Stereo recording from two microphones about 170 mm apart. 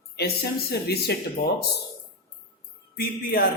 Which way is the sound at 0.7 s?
70° left (ahead or behind).